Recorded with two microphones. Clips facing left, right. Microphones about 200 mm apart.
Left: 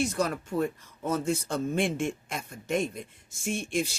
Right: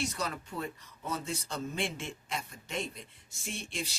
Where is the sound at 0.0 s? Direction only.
50° left (ahead or behind).